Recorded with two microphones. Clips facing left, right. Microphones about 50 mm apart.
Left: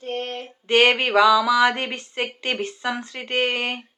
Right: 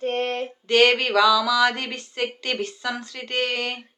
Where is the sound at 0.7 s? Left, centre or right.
Left.